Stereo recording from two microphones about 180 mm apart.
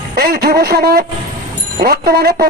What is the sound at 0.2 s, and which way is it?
Speech, 60° right (ahead or behind).